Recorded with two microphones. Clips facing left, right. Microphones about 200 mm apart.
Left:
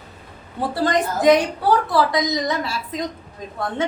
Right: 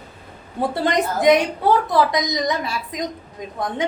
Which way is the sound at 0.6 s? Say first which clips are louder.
Even; 20° right (ahead or behind).